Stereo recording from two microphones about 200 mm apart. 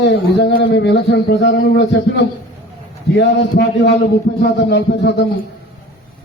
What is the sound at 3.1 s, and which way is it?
A man's voice, 60° left (ahead or behind).